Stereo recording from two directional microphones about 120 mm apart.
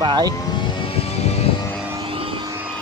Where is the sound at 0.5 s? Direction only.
40° left (ahead or behind).